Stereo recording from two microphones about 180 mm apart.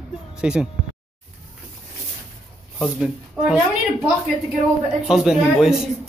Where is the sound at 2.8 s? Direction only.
5° right (ahead or behind).